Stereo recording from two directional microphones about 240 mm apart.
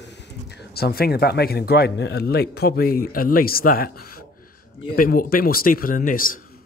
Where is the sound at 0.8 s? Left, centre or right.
Left.